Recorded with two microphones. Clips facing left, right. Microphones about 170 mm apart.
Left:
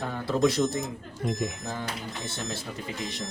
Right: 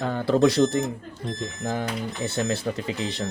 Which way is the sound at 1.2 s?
10° left (ahead or behind).